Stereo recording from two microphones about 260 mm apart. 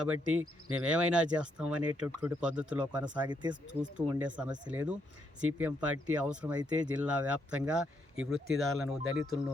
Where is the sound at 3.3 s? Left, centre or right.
Centre.